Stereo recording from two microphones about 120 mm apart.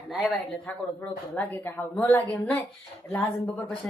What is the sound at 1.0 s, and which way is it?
A woman's voice, 15° left (ahead or behind).